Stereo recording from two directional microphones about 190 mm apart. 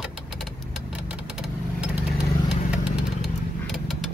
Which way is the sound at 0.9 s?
5° right (ahead or behind).